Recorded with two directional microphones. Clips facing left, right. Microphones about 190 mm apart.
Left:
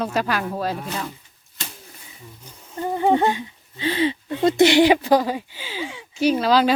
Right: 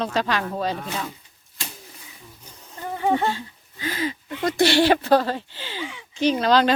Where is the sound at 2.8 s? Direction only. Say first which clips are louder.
Left 4 dB; 35° left (ahead or behind).